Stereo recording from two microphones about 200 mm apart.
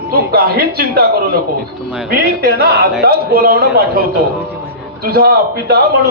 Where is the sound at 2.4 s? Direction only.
50° right (ahead or behind).